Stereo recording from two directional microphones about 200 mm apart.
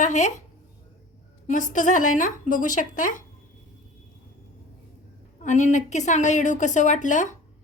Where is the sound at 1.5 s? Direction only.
40° left (ahead or behind).